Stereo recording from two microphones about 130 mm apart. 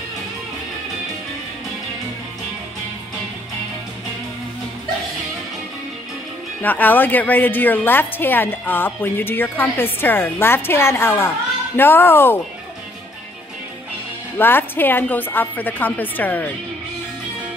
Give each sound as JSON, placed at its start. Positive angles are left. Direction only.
{"t": 6.6, "sound": "a woman's voice", "side_deg": 15}
{"t": 14.4, "sound": "a woman's voice", "side_deg": 15}